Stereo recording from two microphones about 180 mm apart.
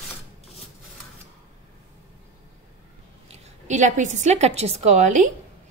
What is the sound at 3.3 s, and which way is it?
A woman's voice, 40° right (ahead or behind).